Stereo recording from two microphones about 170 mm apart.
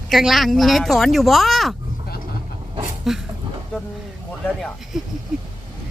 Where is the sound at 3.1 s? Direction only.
Centre (ahead or behind).